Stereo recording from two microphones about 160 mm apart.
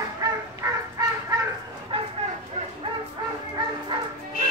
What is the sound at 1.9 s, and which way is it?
Bow-wow, 35° right (ahead or behind).